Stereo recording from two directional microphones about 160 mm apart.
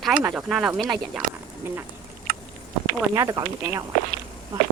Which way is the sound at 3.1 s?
20° right (ahead or behind).